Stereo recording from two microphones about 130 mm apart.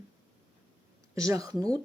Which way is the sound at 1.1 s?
25° right (ahead or behind).